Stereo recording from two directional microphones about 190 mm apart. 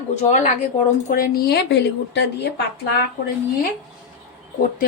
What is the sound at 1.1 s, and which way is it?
Speech, 50° left (ahead or behind).